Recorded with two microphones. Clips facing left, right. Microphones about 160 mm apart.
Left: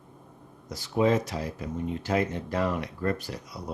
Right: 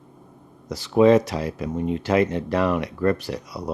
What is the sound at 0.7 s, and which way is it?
Speech, 80° right.